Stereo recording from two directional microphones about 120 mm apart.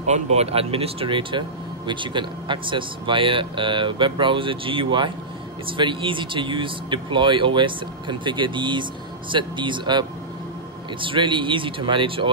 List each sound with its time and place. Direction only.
0.0 s speech: 65° right (ahead or behind); by 12.3 s 45° right (ahead or behind)